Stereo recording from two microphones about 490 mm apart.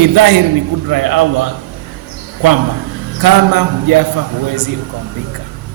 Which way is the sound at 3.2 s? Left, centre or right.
Right.